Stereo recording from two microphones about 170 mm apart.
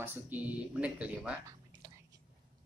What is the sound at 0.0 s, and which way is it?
A man's voice, 10° right (ahead or behind).